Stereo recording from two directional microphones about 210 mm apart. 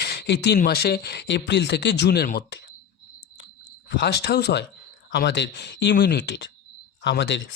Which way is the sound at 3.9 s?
50° left (ahead or behind).